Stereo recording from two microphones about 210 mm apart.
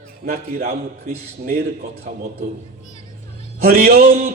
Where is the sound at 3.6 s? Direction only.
45° right (ahead or behind).